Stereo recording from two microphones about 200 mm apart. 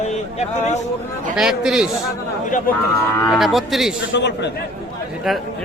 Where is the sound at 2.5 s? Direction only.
40° left (ahead or behind).